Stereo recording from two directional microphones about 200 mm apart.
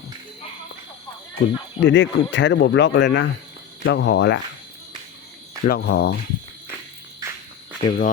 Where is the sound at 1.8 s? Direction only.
65° left (ahead or behind).